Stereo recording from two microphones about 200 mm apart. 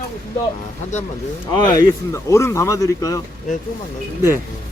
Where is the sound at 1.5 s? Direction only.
20° left (ahead or behind).